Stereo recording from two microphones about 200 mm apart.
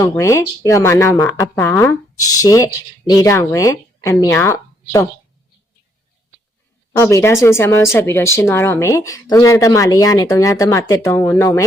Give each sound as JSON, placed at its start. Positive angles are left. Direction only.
{"t": 0.0, "sound": "speech", "side_deg": 15}
{"t": 6.9, "sound": "speech", "side_deg": 15}